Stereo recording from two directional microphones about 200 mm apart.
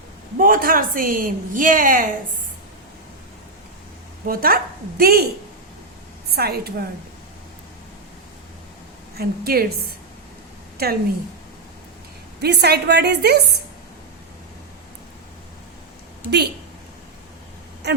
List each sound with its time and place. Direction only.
0.3 s a woman's voice: 45° right (ahead or behind)
4.3 s a woman's voice: 45° right (ahead or behind)
6.3 s a woman's voice: 50° right (ahead or behind)
9.1 s a woman's voice: 50° right (ahead or behind)
10.8 s a woman's voice: 50° right (ahead or behind)
12.4 s a woman's voice: 55° right (ahead or behind)
17.8 s a sound: 55° right (ahead or behind)